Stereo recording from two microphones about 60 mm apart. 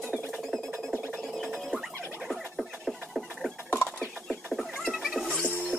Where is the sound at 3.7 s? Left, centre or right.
Left.